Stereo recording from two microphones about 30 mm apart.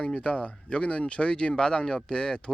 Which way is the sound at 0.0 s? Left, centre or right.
Left.